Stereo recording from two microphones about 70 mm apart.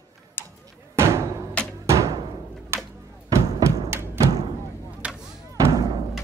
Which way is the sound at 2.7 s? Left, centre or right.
Right.